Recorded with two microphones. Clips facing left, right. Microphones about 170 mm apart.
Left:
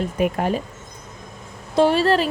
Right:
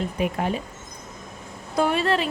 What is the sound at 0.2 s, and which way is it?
Speech, 45° left (ahead or behind).